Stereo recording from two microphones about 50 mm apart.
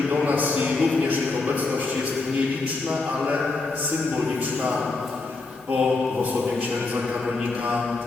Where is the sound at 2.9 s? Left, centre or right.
Right.